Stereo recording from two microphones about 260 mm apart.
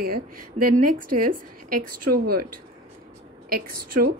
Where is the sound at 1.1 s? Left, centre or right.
Right.